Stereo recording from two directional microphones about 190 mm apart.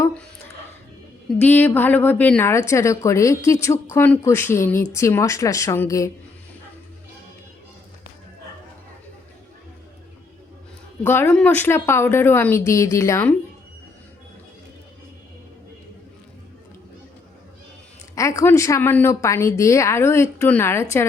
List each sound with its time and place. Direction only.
1.4 s a woman's voice: 10° left (ahead or behind)
11.0 s a woman's voice: 10° left (ahead or behind)
18.1 s a woman's voice: 15° left (ahead or behind)